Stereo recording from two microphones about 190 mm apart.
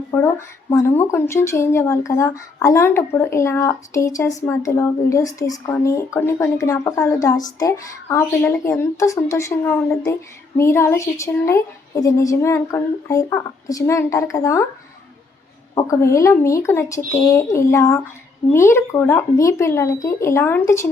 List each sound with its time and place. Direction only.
0.1 s a woman's voice: 15° left (ahead or behind)
15.7 s a woman's voice: 15° left (ahead or behind)